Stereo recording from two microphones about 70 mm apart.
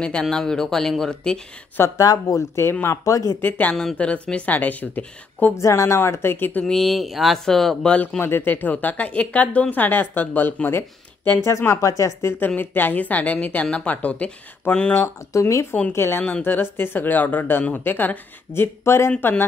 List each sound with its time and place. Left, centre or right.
0.0 s speech: centre
2.0 s speech: left
3.3 s speech: left
5.6 s speech: left
6.6 s speech: centre
8.2 s speech: left
11.4 s speech: left
12.4 s speech: left
15.3 s speech: left
16.2 s speech: left